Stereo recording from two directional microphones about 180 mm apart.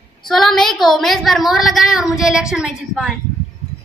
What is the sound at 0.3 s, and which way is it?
A woman's voice, centre (ahead or behind).